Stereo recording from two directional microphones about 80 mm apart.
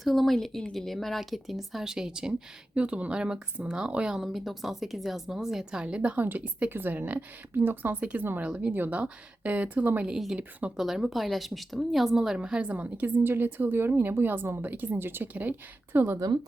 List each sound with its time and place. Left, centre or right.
0.0 s a woman's voice: centre
5.8 s a woman's voice: centre
10.1 s a woman's voice: centre; by 16.1 s right